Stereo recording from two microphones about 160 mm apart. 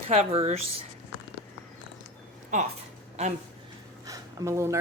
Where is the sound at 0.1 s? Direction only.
40° right (ahead or behind).